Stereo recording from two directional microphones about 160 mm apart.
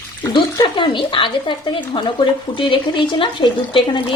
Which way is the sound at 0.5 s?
30° left (ahead or behind).